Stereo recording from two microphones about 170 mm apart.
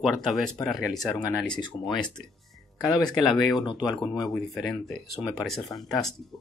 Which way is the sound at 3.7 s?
25° left (ahead or behind).